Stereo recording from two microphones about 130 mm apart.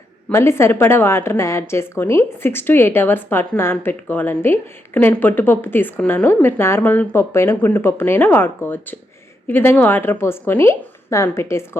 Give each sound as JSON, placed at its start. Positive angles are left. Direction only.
{"t": 0.3, "sound": "a woman's voice", "side_deg": 20}